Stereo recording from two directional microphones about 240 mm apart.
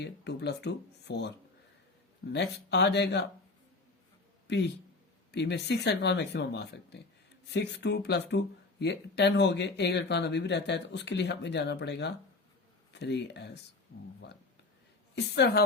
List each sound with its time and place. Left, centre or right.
0.0 s speech: left
2.3 s speech: left
4.4 s speech: left
15.1 s speech: left